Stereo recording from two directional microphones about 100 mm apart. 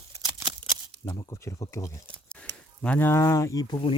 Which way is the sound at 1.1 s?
35° left (ahead or behind).